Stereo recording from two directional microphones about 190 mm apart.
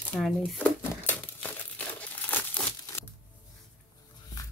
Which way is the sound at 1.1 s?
10° left (ahead or behind).